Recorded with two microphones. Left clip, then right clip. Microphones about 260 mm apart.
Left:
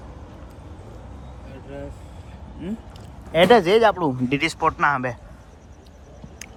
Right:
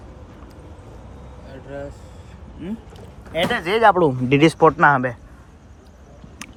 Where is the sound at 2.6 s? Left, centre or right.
Centre.